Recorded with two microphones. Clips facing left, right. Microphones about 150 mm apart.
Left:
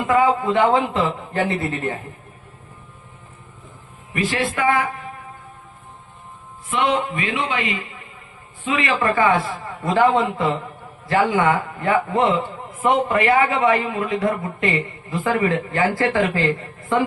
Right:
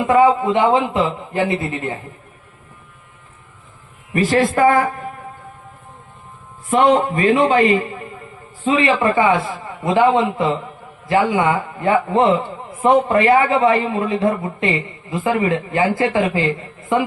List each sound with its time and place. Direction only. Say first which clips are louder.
0.1 s a man's voice: right 4 dB; 25° right (ahead or behind)
4.1 s a man's voice: right 7 dB; 40° right (ahead or behind)
6.7 s a man's voice: right 7 dB; 40° right (ahead or behind)
8.6 s a man's voice: right 5 dB; 30° right (ahead or behind); by 11.6 s 15° right (ahead or behind)
11.8 s a man's voice: right 6 dB; 25° right (ahead or behind)